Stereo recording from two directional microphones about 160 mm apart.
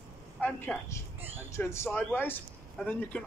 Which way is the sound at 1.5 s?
15° left (ahead or behind).